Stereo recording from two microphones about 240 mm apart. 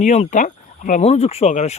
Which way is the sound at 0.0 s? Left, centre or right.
Left.